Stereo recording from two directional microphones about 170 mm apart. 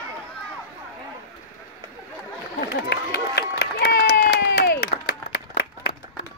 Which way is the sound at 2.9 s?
75° left (ahead or behind).